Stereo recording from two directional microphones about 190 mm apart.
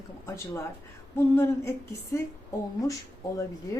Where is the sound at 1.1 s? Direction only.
15° left (ahead or behind).